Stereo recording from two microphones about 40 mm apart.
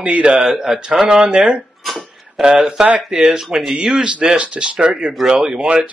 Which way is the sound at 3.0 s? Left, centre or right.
Centre.